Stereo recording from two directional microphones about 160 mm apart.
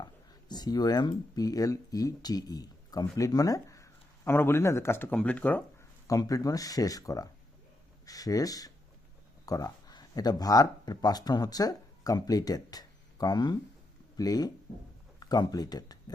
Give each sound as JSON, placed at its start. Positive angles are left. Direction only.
{"t": 0.0, "sound": "a sound", "side_deg": 25}
{"t": 1.4, "sound": "speech", "side_deg": 20}
{"t": 6.1, "sound": "speech", "side_deg": 20}